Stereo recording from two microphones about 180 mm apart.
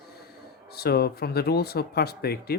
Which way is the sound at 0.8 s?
60° left (ahead or behind).